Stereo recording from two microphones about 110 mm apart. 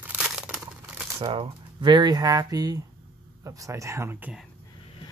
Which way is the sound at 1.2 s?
50° right (ahead or behind).